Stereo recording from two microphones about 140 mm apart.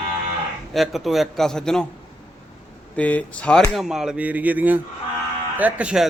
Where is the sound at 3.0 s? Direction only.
10° left (ahead or behind).